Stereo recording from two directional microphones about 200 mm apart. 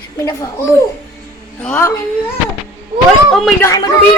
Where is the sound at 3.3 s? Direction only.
Centre (ahead or behind).